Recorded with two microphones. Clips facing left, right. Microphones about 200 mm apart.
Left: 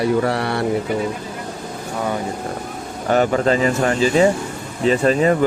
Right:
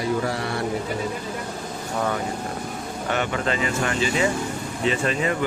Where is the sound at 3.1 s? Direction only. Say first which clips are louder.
Left 9 dB; 40° left (ahead or behind).